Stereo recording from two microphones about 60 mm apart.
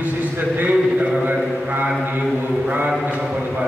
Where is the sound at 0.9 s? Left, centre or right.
Centre.